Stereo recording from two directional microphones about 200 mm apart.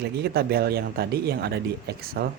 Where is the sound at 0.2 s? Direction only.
50° right (ahead or behind).